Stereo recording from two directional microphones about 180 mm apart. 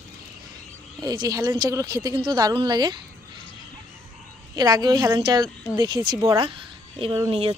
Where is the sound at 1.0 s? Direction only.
20° right (ahead or behind).